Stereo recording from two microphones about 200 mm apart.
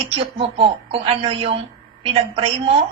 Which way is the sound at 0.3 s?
30° right (ahead or behind).